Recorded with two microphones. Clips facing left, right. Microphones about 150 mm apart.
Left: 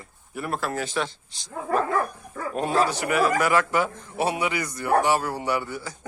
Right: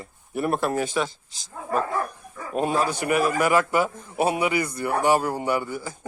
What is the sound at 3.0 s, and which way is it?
Speech, 25° right (ahead or behind).